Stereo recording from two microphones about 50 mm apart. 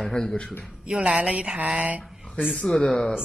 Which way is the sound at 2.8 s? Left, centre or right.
Left.